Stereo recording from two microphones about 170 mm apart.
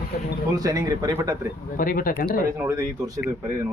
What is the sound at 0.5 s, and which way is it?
Speech, 20° right (ahead or behind).